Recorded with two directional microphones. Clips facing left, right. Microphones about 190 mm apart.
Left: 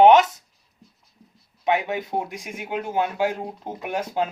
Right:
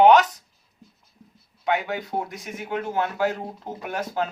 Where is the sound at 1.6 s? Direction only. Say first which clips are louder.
Left 2 dB; 20° left (ahead or behind).